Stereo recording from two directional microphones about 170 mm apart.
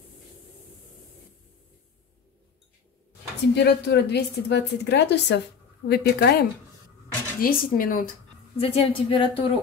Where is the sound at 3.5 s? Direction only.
75° left (ahead or behind); by 5.4 s 90° left.